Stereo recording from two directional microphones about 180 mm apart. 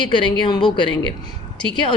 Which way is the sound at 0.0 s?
25° left (ahead or behind).